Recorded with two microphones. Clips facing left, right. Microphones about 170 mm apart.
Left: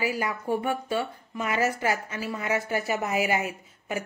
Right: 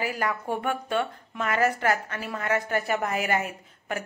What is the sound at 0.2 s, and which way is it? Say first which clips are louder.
A woman's voice: even; 10° left (ahead or behind).